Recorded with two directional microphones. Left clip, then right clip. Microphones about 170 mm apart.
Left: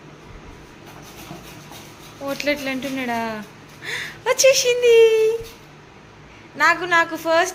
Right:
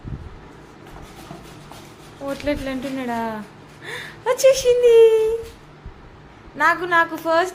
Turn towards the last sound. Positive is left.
turn(degrees=-15)  # may be behind; listen again after turning